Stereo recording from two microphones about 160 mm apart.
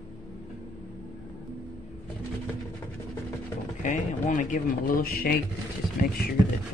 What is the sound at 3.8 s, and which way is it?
Speech, 50° left (ahead or behind).